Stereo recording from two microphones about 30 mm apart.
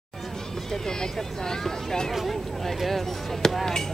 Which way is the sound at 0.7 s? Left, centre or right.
Left.